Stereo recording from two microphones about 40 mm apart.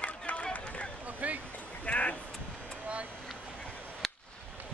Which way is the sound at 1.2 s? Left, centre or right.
Right.